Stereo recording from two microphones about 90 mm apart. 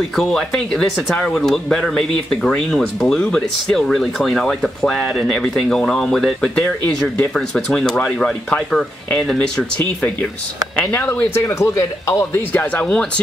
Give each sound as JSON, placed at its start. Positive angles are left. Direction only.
{"t": 0.1, "sound": "speech", "side_deg": 5}
{"t": 10.9, "sound": "a man's voice", "side_deg": 25}
{"t": 12.7, "sound": "speech", "side_deg": 15}